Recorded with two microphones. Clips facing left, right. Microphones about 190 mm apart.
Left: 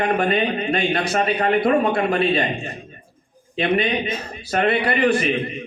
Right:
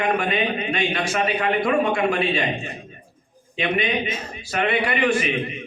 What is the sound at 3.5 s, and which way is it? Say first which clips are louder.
A man's voice: left 3 dB; 35° left (ahead or behind).